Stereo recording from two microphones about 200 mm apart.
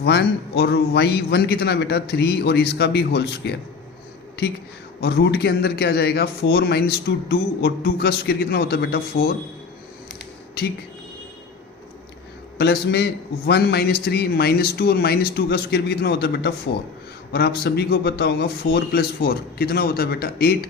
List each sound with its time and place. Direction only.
0.0 s a man's voice: 55° left (ahead or behind)
4.9 s a man's voice: 55° left (ahead or behind)
12.5 s a man's voice: 55° left (ahead or behind)